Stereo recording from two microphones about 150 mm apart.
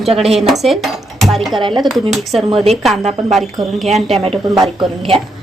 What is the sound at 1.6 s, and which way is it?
Speech, 30° right (ahead or behind).